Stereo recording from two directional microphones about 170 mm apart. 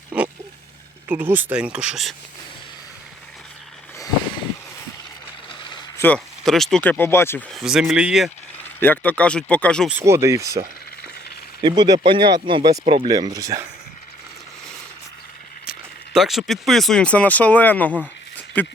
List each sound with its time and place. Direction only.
1.0 s speech: 10° right (ahead or behind)
5.5 s vehicle: 30° left (ahead or behind)
6.0 s speech: 5° left (ahead or behind)
7.5 s speech: 5° right (ahead or behind)
8.8 s speech: 10° left (ahead or behind)
10.0 s speech: 15° right (ahead or behind)
11.6 s speech: 25° right (ahead or behind)
13.1 s speech: 20° right (ahead or behind)
16.1 s speech: centre (ahead or behind)
18.3 s a sound: 10° left (ahead or behind)